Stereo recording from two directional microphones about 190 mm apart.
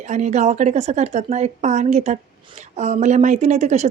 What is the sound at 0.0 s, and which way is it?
Speech, 40° right (ahead or behind).